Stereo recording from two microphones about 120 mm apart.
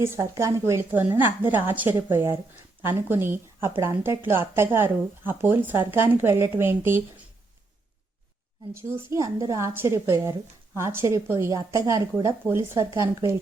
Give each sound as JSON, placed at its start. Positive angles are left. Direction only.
{"t": 0.0, "sound": "a woman's voice", "side_deg": -25}
{"t": 9.0, "sound": "a woman's voice", "side_deg": -30}